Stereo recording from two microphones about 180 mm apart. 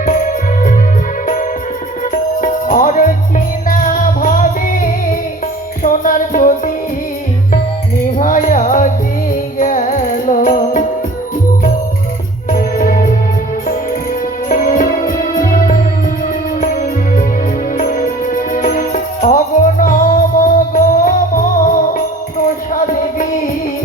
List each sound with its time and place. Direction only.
0.0 s music: 45° left (ahead or behind)
2.4 s music: 45° left (ahead or behind)
8.2 s music: 50° left (ahead or behind)
12.5 s music: 50° left (ahead or behind)
14.5 s music: 50° left (ahead or behind)
22.7 s music: 50° left (ahead or behind)